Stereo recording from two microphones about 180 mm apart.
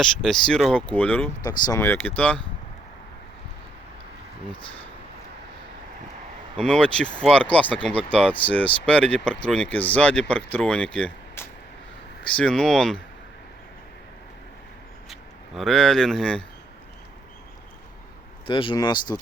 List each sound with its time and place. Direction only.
0.0 s speech: centre (ahead or behind)
1.5 s speech: 20° left (ahead or behind)
6.6 s speech: 5° left (ahead or behind)
15.1 s speech: centre (ahead or behind)
18.4 s speech: 30° left (ahead or behind)